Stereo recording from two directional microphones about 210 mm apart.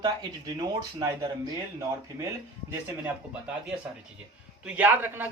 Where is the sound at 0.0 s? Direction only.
20° right (ahead or behind).